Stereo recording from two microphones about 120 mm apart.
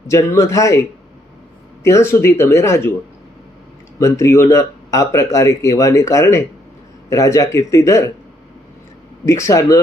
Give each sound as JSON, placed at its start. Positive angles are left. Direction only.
{"t": 0.1, "sound": "speech", "side_deg": 25}
{"t": 1.8, "sound": "speech", "side_deg": 25}
{"t": 3.9, "sound": "speech", "side_deg": 25}
{"t": 9.2, "sound": "speech", "side_deg": 25}